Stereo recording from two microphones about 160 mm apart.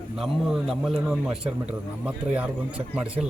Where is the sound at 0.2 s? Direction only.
Centre (ahead or behind).